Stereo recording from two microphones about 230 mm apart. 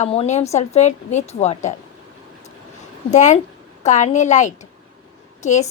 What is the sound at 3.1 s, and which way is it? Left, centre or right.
A woman's voice, left.